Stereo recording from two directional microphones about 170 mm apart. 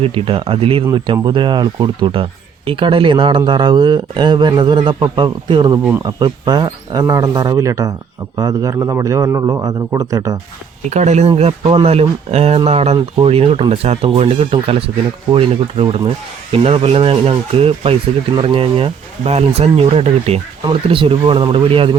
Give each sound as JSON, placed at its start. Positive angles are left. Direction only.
{"t": 0.0, "sound": "speech", "side_deg": -30}
{"t": 10.8, "sound": "speech", "side_deg": -40}